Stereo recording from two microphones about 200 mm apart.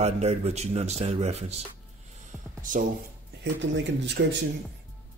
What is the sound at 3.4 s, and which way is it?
Speech, 60° right (ahead or behind).